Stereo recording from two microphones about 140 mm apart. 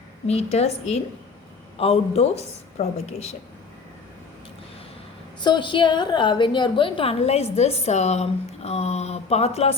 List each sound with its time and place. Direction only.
0.3 s speech: 50° left (ahead or behind)
5.4 s a woman's voice: 35° left (ahead or behind)